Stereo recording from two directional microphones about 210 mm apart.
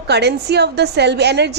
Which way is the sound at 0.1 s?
50° right (ahead or behind).